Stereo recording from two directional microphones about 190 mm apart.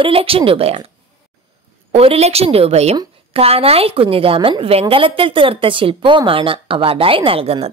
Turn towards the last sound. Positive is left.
turn(degrees=-30)  # may be behind; listen again after turning